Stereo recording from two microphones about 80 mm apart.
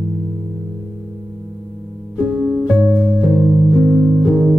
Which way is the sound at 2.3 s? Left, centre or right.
Centre.